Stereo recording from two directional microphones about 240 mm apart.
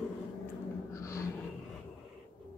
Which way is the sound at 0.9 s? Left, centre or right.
Centre.